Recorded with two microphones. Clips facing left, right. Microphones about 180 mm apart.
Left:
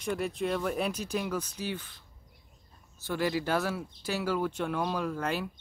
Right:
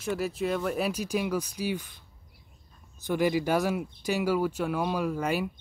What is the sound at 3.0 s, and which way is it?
Speech, 15° right (ahead or behind).